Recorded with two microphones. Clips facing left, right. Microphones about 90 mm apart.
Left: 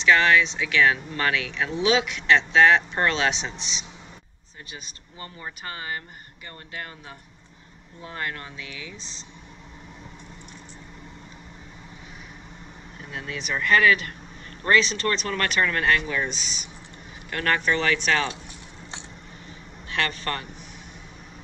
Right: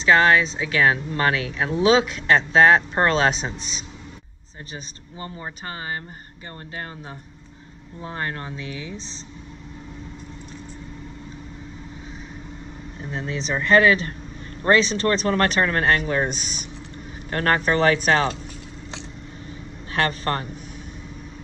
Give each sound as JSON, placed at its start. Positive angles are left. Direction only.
{"t": 0.0, "sound": "speech", "side_deg": -35}
{"t": 5.2, "sound": "speech", "side_deg": -30}
{"t": 8.0, "sound": "speech", "side_deg": -30}
{"t": 13.0, "sound": "speech", "side_deg": -30}
{"t": 19.9, "sound": "speech", "side_deg": -35}